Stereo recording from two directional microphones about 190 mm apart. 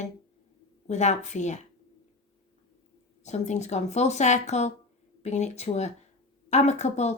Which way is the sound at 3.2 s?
35° left (ahead or behind).